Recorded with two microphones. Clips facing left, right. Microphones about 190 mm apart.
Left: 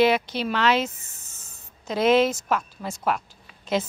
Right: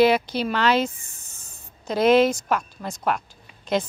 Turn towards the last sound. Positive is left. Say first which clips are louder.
# right 1 dB
turn(degrees=5)  # may be behind; listen again after turning